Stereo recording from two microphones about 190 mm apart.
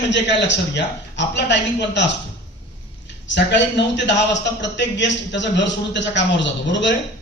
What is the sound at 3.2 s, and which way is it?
A man's voice, 70° left (ahead or behind).